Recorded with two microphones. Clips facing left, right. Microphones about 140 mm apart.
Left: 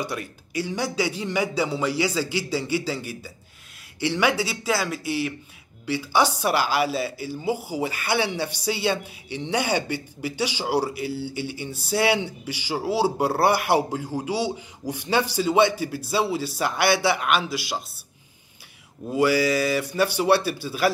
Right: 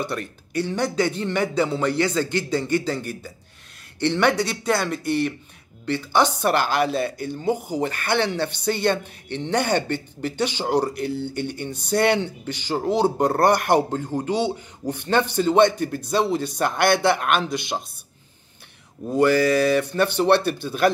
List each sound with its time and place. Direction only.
0.0 s a man's voice: 10° left (ahead or behind)
11.1 s speech: 55° right (ahead or behind)
11.3 s a man's voice: 5° left (ahead or behind)
19.1 s speech: 10° left (ahead or behind)